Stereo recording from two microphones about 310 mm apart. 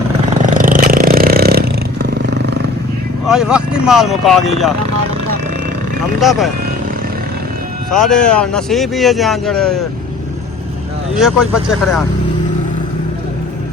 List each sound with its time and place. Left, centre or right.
0.4 s vehicle: right
3.2 s speech: centre
6.1 s speech: centre
7.9 s speech: centre
11.2 s speech: centre